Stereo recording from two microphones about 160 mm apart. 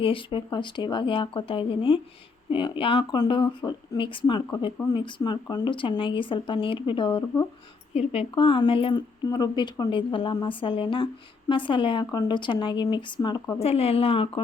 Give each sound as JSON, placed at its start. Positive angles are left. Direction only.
{"t": 0.0, "sound": "a woman's voice", "side_deg": 30}
{"t": 7.9, "sound": "a woman's voice", "side_deg": 40}
{"t": 13.6, "sound": "speech", "side_deg": 40}